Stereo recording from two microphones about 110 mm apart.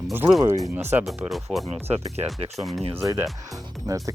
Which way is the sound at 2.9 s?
25° right (ahead or behind).